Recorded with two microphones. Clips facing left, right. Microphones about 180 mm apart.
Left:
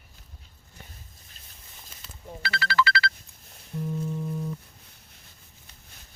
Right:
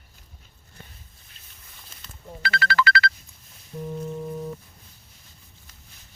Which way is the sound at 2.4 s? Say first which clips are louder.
Right 2 dB; 55° right (ahead or behind).